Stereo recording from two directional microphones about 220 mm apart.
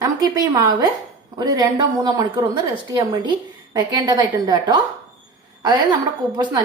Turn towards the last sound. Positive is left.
turn(degrees=-15)  # may be behind; listen again after turning